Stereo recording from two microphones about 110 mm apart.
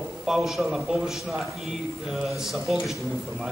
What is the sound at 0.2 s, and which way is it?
A man's voice, 5° right (ahead or behind).